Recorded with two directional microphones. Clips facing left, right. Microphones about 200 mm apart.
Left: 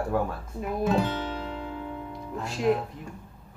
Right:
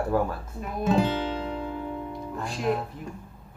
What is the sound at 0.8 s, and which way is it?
Guitar, 25° right (ahead or behind).